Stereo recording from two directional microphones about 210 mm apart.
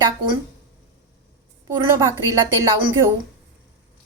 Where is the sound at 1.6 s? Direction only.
15° right (ahead or behind).